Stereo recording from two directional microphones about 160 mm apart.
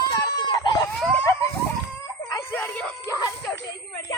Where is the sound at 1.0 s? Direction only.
5° left (ahead or behind).